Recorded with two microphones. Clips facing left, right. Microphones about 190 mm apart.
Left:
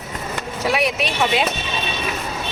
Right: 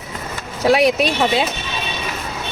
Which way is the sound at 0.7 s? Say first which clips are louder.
Right 7 dB; 40° right (ahead or behind).